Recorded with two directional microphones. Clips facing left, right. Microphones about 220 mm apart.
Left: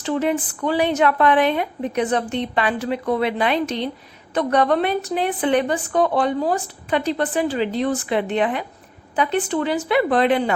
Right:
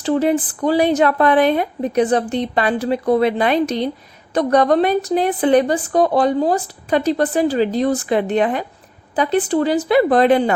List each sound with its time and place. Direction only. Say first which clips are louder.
0.0 s a woman's voice: right 5 dB; 35° right (ahead or behind)